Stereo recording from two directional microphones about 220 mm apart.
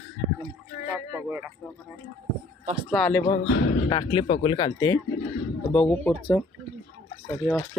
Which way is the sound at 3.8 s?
20° left (ahead or behind).